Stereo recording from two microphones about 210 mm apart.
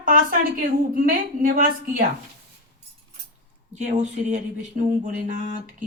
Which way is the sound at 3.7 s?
35° right (ahead or behind).